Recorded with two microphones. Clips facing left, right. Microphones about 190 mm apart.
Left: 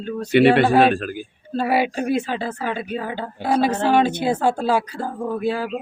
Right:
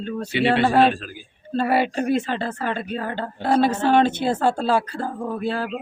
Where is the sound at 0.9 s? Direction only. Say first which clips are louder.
Left 6 dB; 55° left (ahead or behind).